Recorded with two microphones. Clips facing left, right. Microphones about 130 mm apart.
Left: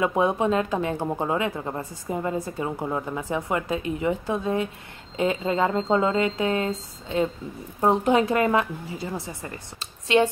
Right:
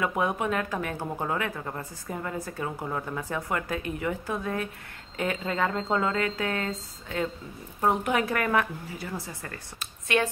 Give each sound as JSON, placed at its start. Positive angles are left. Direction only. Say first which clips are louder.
{"t": 0.0, "sound": "speech", "louder": "left 5 dB", "side_deg": 25}